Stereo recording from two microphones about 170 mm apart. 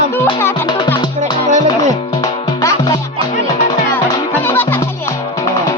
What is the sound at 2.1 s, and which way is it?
Music, 25° left (ahead or behind).